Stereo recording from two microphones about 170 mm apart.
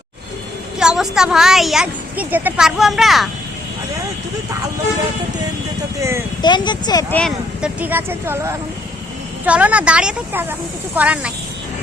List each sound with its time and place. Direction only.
0.8 s a woman's voice: 5° right (ahead or behind)
6.0 s speech: 15° right (ahead or behind)
6.4 s speech: 25° left (ahead or behind)
7.1 s a woman's voice: 5° left (ahead or behind)
7.6 s speech: 10° right (ahead or behind)